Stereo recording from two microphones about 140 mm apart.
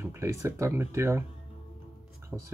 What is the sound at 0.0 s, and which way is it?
Speech, 20° right (ahead or behind).